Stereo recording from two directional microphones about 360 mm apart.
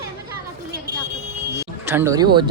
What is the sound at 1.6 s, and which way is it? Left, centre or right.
Speech, centre.